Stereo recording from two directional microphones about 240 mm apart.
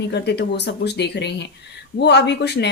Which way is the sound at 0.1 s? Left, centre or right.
Left.